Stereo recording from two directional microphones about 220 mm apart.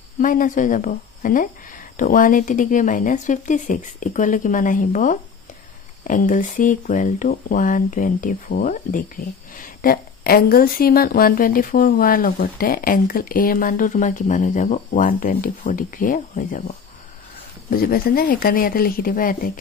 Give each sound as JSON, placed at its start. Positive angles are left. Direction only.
{"t": 0.2, "sound": "speech", "side_deg": 35}